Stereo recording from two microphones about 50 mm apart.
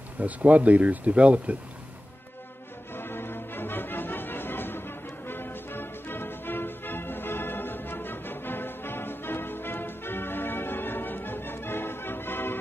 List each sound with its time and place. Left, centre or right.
0.2 s speech: right
2.9 s music: left